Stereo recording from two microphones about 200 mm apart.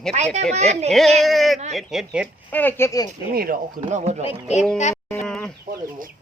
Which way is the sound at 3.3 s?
45° right (ahead or behind).